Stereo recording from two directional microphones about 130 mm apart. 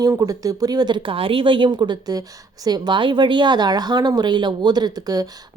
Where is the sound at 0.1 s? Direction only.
25° right (ahead or behind).